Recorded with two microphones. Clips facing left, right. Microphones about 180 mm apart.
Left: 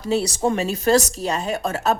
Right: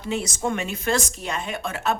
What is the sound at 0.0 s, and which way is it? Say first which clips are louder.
A woman's voice: left 6 dB; 35° left (ahead or behind).